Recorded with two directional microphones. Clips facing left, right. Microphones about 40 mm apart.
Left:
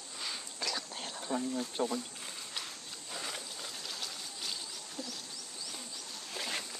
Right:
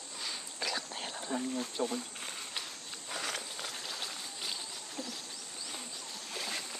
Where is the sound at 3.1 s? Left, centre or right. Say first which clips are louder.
Right 3 dB; right.